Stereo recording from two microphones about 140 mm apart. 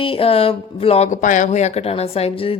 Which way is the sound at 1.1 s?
65° left (ahead or behind).